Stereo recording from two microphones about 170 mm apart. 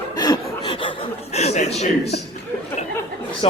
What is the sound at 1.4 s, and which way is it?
Speech, 40° left (ahead or behind).